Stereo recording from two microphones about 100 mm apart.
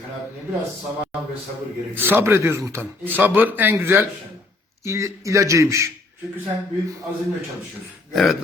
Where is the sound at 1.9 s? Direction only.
20° right (ahead or behind).